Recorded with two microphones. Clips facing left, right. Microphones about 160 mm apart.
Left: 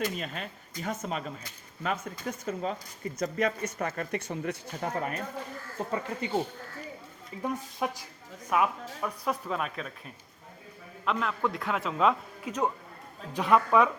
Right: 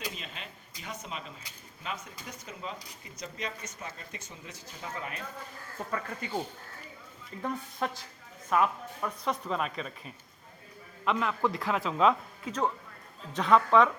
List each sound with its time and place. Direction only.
0.2 s speech: 50° left (ahead or behind)
5.9 s speech: 25° left (ahead or behind)
7.4 s speech: 15° left (ahead or behind)
11.0 s speech: centre (ahead or behind)